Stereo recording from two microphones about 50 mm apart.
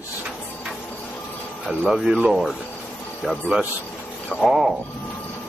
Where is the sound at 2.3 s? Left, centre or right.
Centre.